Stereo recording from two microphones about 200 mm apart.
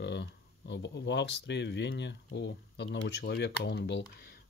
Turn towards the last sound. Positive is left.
turn(degrees=55)  # may be behind; listen again after turning